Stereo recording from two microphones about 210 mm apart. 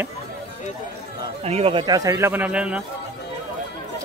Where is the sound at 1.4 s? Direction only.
30° right (ahead or behind); by 2.8 s 5° right (ahead or behind).